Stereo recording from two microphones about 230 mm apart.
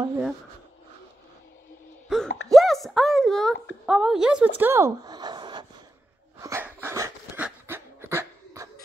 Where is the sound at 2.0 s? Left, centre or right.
Centre.